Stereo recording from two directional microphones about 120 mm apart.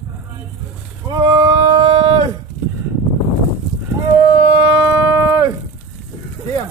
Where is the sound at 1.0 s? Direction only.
35° right (ahead or behind).